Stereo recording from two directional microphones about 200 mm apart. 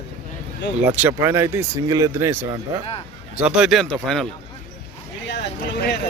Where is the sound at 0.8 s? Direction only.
10° right (ahead or behind).